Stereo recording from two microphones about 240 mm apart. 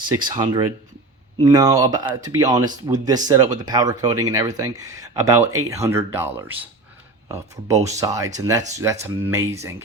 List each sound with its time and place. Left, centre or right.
0.2 s speech: centre